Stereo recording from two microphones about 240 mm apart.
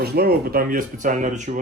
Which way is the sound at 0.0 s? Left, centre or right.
Right.